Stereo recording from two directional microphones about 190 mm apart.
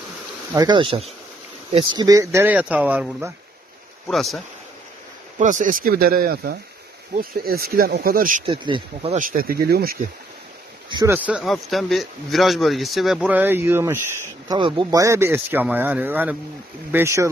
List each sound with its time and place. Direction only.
0.5 s a man's voice: 20° right (ahead or behind); by 4.4 s centre (ahead or behind)
5.4 s speech: 40° right (ahead or behind)
8.5 s speech: 25° right (ahead or behind); by 9.9 s 55° right (ahead or behind)
10.9 s speech: 20° right (ahead or behind)
11.1 s a man's voice: 5° right (ahead or behind)